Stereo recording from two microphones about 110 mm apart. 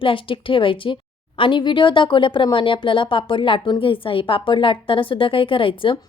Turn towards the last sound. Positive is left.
turn(degrees=50)  # may be behind; listen again after turning